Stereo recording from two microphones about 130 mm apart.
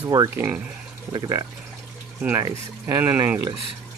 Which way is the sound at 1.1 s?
30° right (ahead or behind).